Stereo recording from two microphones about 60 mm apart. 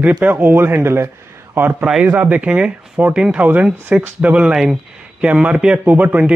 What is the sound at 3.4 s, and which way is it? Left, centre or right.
Speech, right.